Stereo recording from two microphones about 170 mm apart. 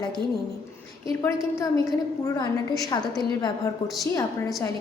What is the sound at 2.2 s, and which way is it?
A woman's voice, 20° left (ahead or behind).